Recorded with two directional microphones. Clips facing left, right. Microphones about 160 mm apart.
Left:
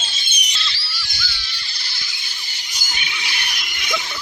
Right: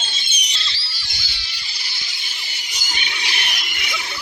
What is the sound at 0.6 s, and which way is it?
Music, 25° right (ahead or behind).